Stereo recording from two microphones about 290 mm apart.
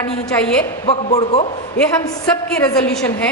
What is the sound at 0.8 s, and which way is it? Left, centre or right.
Speech, left.